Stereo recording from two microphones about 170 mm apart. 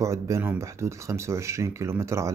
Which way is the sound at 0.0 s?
15° right (ahead or behind).